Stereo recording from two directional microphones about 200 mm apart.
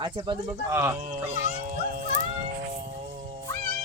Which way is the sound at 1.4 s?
40° right (ahead or behind).